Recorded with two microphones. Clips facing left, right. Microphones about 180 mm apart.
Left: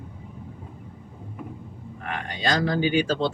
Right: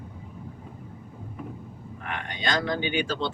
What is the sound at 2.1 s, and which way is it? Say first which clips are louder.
Speech: left 3 dB; 35° left (ahead or behind).